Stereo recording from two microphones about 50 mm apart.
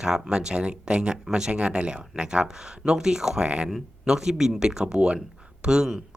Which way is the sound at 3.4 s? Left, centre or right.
Right.